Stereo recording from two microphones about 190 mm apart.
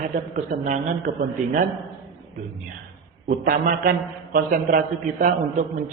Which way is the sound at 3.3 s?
45° right (ahead or behind).